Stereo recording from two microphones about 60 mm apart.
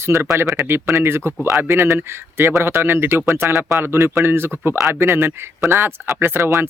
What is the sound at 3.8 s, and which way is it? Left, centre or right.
Speech, right.